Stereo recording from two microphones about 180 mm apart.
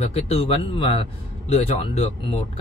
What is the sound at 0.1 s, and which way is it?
A man's voice, 35° left (ahead or behind).